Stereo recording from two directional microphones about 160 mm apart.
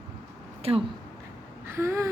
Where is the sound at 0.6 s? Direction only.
35° right (ahead or behind).